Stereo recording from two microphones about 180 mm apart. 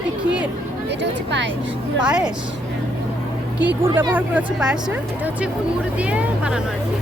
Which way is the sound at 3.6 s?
10° right (ahead or behind).